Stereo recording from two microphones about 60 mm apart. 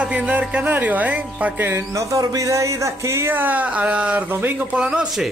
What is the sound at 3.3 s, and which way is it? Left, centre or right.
Speech, right.